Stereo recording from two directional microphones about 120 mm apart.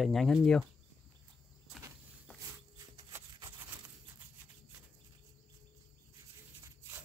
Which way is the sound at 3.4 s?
15° right (ahead or behind).